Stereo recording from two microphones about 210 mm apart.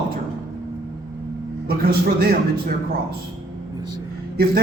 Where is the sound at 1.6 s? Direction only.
45° right (ahead or behind).